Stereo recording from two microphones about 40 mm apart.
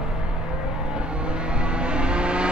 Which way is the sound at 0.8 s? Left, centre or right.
Right.